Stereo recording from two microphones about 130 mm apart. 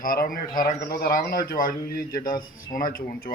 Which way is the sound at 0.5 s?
90° left.